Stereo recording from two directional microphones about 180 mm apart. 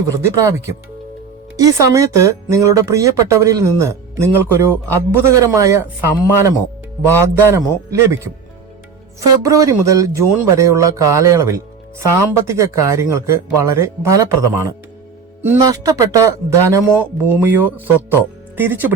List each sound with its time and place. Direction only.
1.5 s speech: 20° right (ahead or behind)
9.4 s speech: 15° right (ahead or behind)